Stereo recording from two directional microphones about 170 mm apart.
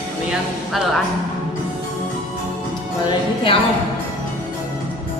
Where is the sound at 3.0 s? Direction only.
30° left (ahead or behind).